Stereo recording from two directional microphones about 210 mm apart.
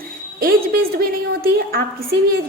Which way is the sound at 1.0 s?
45° right (ahead or behind).